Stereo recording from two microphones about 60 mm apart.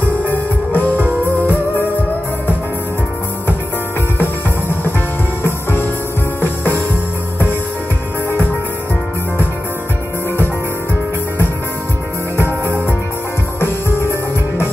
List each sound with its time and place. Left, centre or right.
0.2 s music: left
4.2 s music: left
12.4 s music: right
13.6 s music: left